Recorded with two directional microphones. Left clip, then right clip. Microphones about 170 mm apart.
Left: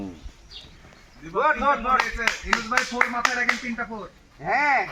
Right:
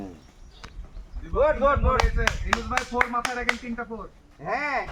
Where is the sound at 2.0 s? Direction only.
60° right (ahead or behind).